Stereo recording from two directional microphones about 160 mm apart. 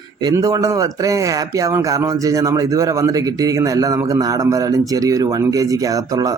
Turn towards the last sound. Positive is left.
turn(degrees=-20)  # may be behind; listen again after turning